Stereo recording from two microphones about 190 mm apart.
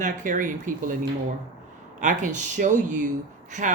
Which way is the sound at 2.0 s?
40° right (ahead or behind).